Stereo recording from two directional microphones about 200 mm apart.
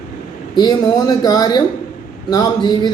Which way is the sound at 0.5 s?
20° left (ahead or behind).